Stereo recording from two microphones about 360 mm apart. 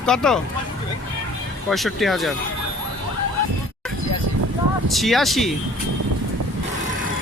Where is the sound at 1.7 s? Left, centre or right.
Centre.